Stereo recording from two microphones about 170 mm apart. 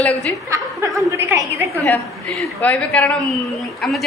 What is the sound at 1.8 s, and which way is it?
A woman's voice, 10° left (ahead or behind).